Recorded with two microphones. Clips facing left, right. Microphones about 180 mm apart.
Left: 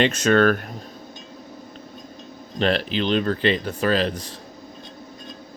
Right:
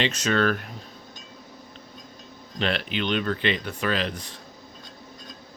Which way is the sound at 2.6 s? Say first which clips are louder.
Left 5 dB; 40° left (ahead or behind).